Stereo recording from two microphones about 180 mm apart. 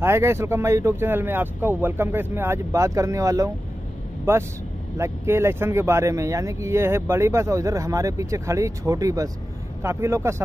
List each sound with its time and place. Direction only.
0.0 s speech: 15° right (ahead or behind)